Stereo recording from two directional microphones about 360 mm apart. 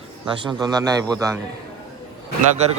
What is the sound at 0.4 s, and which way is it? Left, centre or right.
Speech, centre.